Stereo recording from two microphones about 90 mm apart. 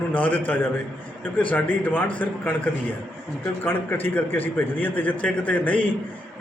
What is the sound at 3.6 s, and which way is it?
A man's voice, 20° left (ahead or behind).